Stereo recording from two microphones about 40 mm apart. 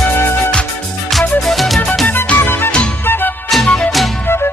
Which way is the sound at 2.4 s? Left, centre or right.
Left.